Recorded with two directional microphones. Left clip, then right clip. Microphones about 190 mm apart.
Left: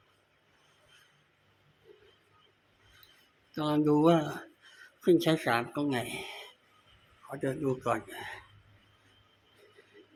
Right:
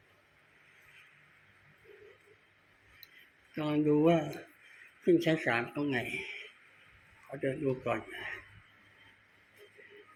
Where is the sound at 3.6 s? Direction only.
15° left (ahead or behind).